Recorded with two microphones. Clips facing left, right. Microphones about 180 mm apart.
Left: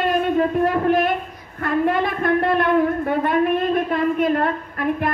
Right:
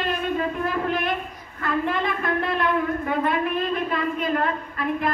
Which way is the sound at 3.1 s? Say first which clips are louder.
Left 5 dB; 50° left (ahead or behind).